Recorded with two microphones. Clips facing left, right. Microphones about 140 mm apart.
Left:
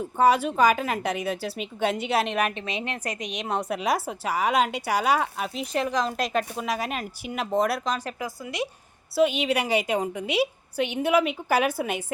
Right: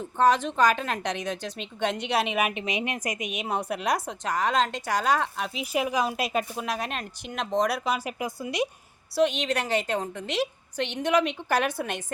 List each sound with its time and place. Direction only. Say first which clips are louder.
0.0 s a woman's voice: left 2 dB; 10° left (ahead or behind)
5.7 s a woman's voice: even; 10° right (ahead or behind)
7.9 s speech: right 1 dB; 10° right (ahead or behind)
9.1 s a woman's voice: left 2 dB; 5° left (ahead or behind)